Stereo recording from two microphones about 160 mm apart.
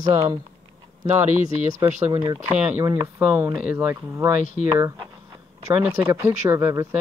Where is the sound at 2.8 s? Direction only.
20° right (ahead or behind).